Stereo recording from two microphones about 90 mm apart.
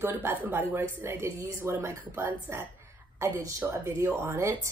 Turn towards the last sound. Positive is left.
turn(degrees=-30)  # may be behind; listen again after turning